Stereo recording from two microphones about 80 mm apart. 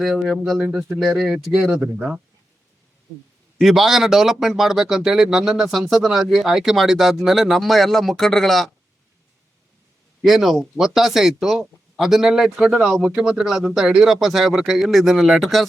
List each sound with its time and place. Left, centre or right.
0.0 s speech: centre
0.6 s speech: centre
1.5 s speech: centre
3.6 s speech: centre
10.2 s speech: centre